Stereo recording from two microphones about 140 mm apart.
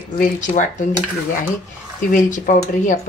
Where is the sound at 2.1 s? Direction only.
65° left (ahead or behind).